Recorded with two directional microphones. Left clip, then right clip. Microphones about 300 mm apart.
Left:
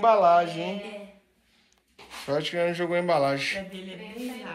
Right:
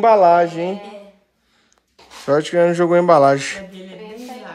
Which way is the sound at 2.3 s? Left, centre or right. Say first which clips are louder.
Right 11 dB; right.